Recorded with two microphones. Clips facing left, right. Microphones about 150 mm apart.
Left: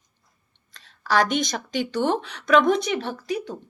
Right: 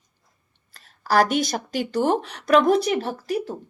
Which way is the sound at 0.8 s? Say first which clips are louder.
Right 2 dB; 35° right (ahead or behind).